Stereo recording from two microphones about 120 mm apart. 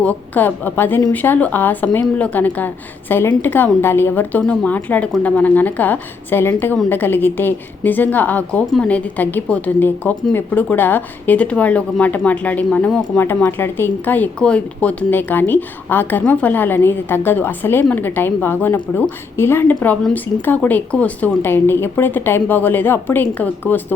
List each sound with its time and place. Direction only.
0.0 s a woman's voice: 15° left (ahead or behind)